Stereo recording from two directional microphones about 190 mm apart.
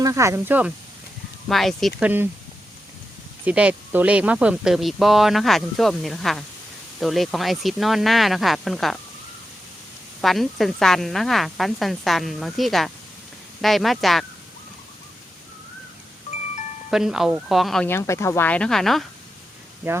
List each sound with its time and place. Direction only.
0.0 s speech: 15° right (ahead or behind)
1.5 s speech: centre (ahead or behind)
3.4 s speech: 5° right (ahead or behind)
10.2 s speech: centre (ahead or behind)
16.9 s speech: centre (ahead or behind)
17.8 s speech: 15° left (ahead or behind)
19.9 s speech: 10° right (ahead or behind)